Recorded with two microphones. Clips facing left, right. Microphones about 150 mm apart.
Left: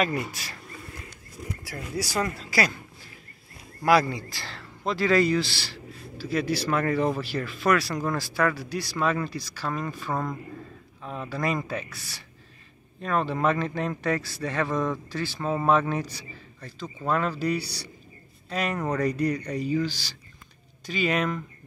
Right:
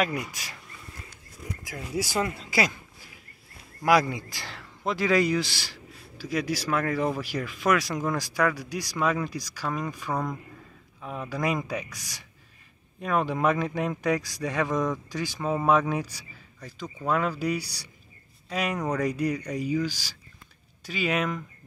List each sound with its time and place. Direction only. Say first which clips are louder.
0.0 s a man's voice: left 1 dB; 15° right (ahead or behind)
1.7 s a man's voice: right 2 dB; 15° right (ahead or behind)
10.1 s a man's voice: even; centre (ahead or behind)
11.0 s a man's voice: even; 10° right (ahead or behind)
15.5 s a man's voice: even; 5° right (ahead or behind)